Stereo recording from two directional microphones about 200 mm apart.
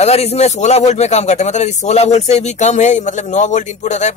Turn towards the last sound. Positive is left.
turn(degrees=35)  # may be behind; listen again after turning